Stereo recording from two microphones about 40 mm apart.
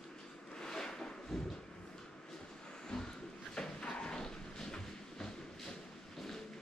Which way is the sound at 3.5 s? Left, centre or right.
Centre.